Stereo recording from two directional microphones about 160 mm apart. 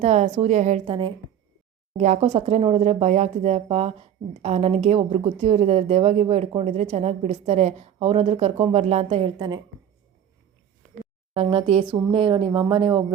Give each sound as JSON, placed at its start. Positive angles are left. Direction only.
{"t": 0.0, "sound": "a woman's voice", "side_deg": -45}
{"t": 11.3, "sound": "speech", "side_deg": -40}